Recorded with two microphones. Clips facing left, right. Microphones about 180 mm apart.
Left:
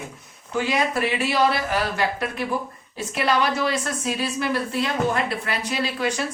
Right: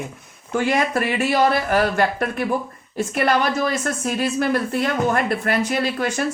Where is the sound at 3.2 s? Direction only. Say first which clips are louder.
Right 1 dB; 45° right (ahead or behind).